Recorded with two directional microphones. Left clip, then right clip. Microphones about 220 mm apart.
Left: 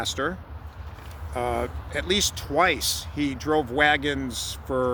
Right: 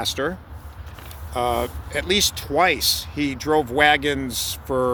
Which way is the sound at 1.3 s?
25° right (ahead or behind).